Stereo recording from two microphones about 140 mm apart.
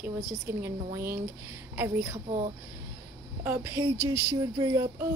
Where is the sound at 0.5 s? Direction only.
20° right (ahead or behind).